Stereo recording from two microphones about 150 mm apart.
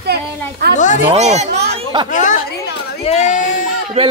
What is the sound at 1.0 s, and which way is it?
Speech, 45° right (ahead or behind).